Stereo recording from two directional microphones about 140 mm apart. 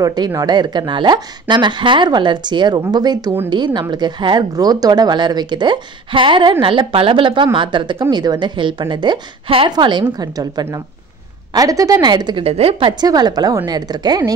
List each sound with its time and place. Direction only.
0.0 s a woman's voice: 25° right (ahead or behind)